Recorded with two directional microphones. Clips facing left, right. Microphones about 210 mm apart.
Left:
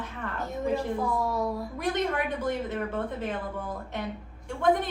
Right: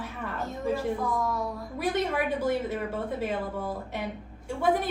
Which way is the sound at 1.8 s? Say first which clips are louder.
Right 1 dB; 10° right (ahead or behind).